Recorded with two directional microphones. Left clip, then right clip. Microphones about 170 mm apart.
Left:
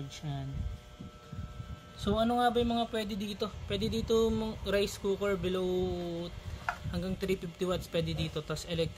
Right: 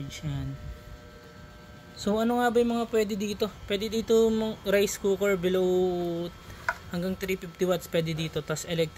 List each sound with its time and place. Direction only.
2.0 s speech: 10° right (ahead or behind)